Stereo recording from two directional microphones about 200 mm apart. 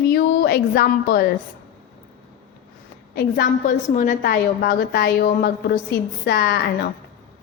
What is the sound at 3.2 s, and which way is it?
A woman's voice, 45° left (ahead or behind).